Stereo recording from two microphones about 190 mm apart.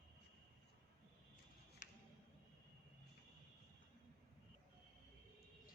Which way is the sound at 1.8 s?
45° left (ahead or behind).